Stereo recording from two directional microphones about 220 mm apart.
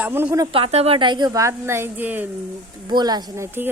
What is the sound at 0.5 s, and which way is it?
A woman's voice, 25° right (ahead or behind).